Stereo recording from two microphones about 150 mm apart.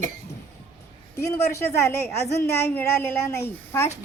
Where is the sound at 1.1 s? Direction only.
20° left (ahead or behind).